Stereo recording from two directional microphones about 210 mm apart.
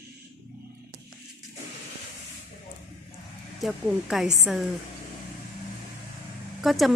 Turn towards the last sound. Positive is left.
turn(degrees=0)  # may be behind; listen again after turning